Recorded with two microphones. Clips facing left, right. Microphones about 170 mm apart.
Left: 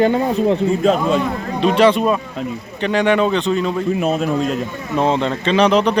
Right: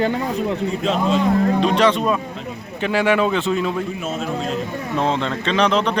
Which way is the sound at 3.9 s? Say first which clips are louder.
Left 7 dB; 60° left (ahead or behind).